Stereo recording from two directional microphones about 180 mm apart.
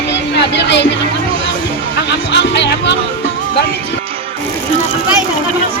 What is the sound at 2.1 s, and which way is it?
Music, 70° left (ahead or behind).